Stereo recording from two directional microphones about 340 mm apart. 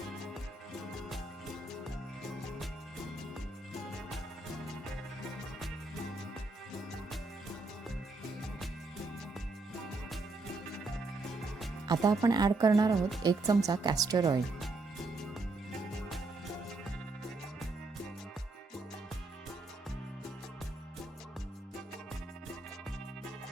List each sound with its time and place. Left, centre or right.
11.9 s speech: centre
16.0 s music: centre